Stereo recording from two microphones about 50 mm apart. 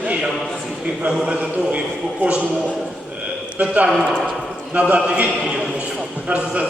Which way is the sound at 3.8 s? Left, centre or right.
Centre.